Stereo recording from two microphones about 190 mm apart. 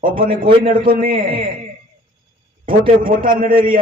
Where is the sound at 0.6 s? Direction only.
30° right (ahead or behind).